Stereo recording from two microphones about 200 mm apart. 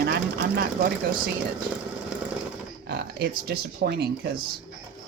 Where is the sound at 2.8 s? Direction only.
50° right (ahead or behind).